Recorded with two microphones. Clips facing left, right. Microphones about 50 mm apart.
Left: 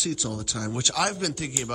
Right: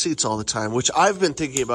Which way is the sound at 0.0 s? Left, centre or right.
Right.